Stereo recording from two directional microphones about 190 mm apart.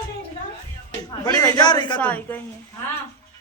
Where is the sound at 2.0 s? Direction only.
10° left (ahead or behind).